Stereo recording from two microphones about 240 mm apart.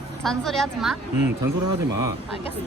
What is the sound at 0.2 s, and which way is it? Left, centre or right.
Speech, centre.